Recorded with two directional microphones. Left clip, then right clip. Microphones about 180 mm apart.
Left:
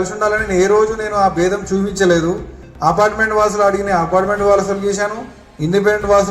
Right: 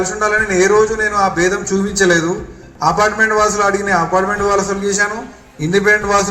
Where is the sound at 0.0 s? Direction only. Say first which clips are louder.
Right 1 dB; 30° left (ahead or behind).